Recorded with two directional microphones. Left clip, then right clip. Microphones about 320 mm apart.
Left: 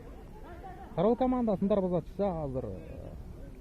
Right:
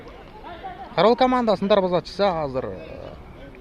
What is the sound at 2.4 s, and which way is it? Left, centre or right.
Speech, right.